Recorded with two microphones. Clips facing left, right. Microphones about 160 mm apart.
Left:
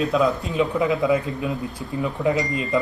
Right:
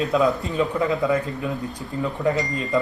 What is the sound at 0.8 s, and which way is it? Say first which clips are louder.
Speech: left 2 dB; 15° left (ahead or behind).